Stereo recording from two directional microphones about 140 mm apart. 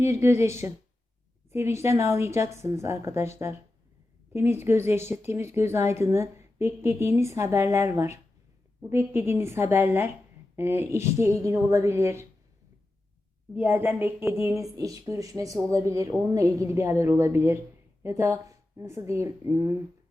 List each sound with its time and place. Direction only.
0.0 s a woman's voice: 20° right (ahead or behind)
13.5 s a woman's voice: 15° right (ahead or behind)